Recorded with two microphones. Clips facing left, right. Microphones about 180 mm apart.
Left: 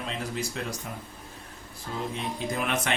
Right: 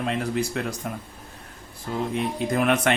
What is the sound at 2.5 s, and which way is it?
Speech, 55° right (ahead or behind).